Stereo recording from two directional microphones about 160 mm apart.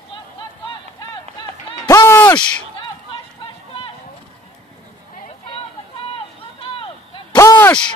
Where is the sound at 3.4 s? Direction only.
35° left (ahead or behind).